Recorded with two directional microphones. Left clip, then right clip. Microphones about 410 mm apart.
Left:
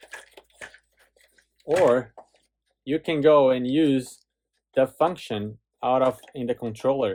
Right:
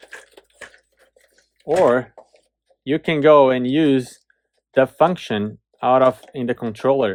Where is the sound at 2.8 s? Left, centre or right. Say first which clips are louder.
Right 5 dB; centre.